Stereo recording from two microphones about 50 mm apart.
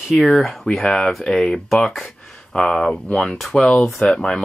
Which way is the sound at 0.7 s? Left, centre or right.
Centre.